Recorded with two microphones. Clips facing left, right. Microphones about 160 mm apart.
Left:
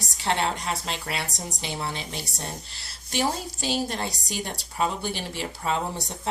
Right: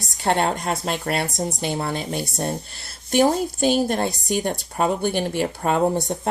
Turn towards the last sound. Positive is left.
turn(degrees=-50)  # may be behind; listen again after turning